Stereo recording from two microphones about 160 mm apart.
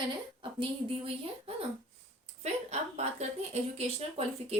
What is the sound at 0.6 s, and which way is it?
A woman's voice, 35° right (ahead or behind).